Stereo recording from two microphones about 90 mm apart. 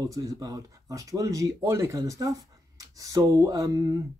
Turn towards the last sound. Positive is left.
turn(degrees=-40)  # may be behind; listen again after turning